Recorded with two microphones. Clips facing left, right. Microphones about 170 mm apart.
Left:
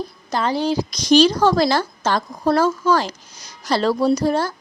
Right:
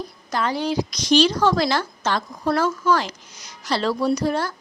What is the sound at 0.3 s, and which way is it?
Speech, 30° left (ahead or behind).